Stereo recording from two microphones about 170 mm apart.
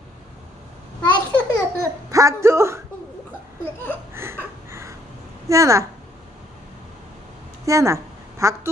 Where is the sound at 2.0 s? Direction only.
20° right (ahead or behind).